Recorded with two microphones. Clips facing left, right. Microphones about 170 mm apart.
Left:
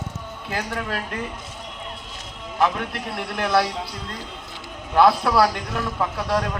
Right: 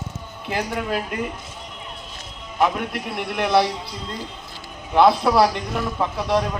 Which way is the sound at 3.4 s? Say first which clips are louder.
Right 2 dB; 25° right (ahead or behind).